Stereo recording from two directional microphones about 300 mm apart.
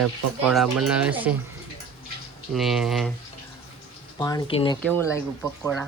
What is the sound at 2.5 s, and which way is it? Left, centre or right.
Speech, centre.